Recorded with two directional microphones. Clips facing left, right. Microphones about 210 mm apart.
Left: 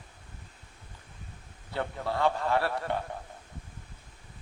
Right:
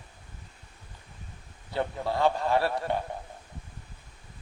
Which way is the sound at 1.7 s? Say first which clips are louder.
Right 3 dB; 15° right (ahead or behind).